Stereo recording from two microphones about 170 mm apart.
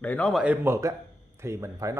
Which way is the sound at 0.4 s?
10° right (ahead or behind).